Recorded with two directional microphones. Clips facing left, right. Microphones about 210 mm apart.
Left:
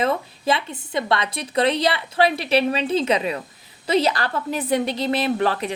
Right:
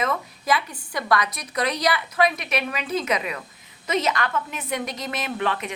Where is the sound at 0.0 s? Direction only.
30° left (ahead or behind).